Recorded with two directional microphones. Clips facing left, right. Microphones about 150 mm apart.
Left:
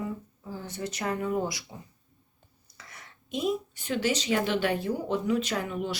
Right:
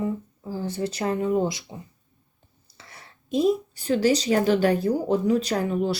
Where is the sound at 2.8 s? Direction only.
30° right (ahead or behind).